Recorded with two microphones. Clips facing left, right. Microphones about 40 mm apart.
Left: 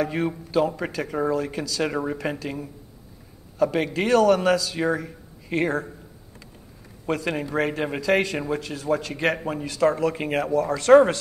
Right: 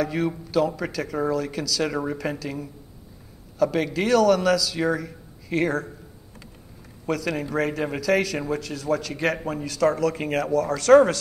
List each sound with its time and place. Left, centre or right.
0.0 s speech: left
7.1 s a man's voice: left